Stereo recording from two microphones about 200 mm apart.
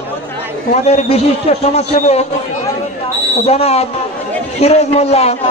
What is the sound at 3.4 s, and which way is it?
A man's voice, 30° left (ahead or behind).